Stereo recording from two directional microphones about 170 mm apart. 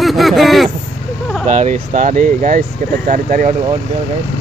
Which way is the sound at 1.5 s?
45° right (ahead or behind).